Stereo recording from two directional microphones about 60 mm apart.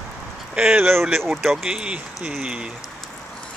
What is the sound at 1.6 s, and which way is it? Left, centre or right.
Speech, centre.